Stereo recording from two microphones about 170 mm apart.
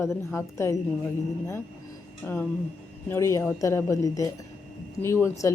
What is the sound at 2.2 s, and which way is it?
A woman's voice, 15° left (ahead or behind).